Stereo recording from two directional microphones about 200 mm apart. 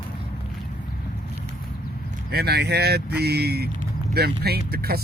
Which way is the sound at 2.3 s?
55° right (ahead or behind).